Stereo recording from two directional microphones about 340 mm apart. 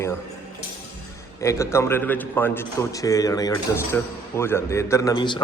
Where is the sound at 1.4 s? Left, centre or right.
Centre.